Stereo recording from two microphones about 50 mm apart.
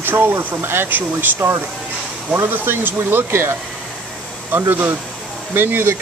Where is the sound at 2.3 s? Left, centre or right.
Right.